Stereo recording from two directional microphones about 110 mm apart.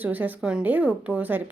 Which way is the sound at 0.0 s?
15° right (ahead or behind).